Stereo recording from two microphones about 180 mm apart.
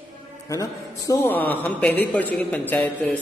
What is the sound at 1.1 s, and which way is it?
A man's voice, 15° left (ahead or behind).